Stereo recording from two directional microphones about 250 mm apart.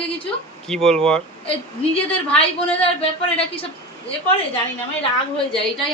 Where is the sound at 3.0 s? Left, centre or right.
Left.